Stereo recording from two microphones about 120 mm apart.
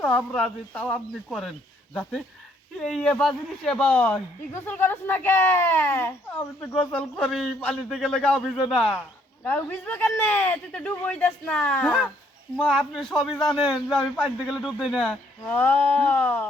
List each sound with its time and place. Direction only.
0.0 s a man's voice: 10° left (ahead or behind)
9.4 s a man's voice: 15° left (ahead or behind)